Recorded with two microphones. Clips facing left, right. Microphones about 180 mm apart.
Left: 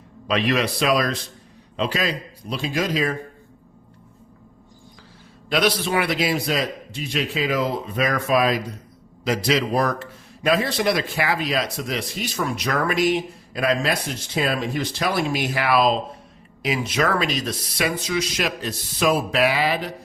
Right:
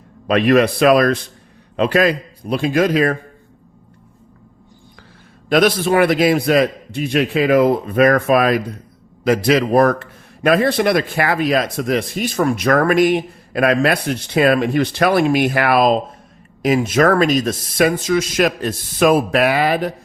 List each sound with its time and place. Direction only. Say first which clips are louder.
0.3 s a man's voice: right 8 dB; 55° right (ahead or behind)
5.5 s a man's voice: right 7 dB; 50° right (ahead or behind)